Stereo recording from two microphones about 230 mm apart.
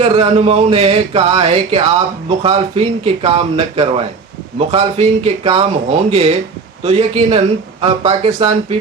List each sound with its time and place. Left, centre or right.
0.0 s speech: right